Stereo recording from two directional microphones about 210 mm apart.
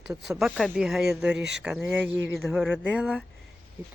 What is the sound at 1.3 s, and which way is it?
Speech, 55° right (ahead or behind).